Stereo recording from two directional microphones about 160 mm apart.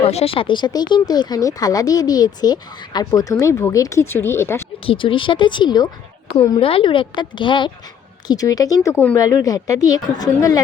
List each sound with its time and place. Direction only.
0.0 s speech: 40° left (ahead or behind); by 4.6 s 15° left (ahead or behind)
4.9 s speech: 30° left (ahead or behind)
6.6 s speech: 35° left (ahead or behind)